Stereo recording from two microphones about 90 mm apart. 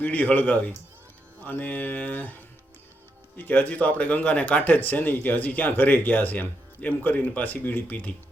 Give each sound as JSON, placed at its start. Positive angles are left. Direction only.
{"t": 0.0, "sound": "speech", "side_deg": 15}
{"t": 3.3, "sound": "speech", "side_deg": 20}